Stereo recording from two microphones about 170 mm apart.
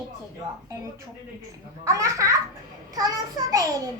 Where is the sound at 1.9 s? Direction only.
20° right (ahead or behind).